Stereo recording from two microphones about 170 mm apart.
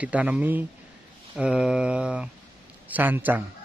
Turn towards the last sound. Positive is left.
turn(degrees=-10)  # may be behind; listen again after turning